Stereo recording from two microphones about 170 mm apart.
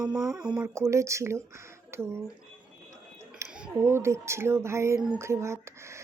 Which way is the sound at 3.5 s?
10° right (ahead or behind).